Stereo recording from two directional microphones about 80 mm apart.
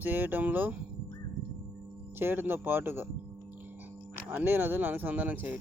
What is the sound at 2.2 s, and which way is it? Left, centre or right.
Speech, right.